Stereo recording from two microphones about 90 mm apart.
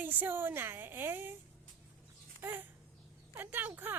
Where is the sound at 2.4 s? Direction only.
25° right (ahead or behind).